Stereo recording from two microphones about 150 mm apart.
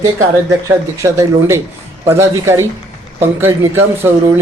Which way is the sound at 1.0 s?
20° right (ahead or behind).